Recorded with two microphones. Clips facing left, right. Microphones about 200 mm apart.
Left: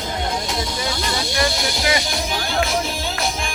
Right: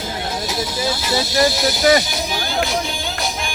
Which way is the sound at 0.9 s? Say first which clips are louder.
Right 3 dB; 5° right (ahead or behind).